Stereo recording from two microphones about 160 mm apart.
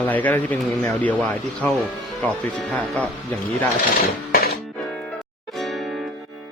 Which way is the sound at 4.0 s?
70° left (ahead or behind).